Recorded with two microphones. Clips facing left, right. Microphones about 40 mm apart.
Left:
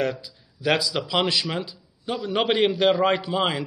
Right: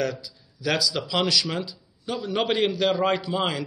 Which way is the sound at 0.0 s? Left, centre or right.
Left.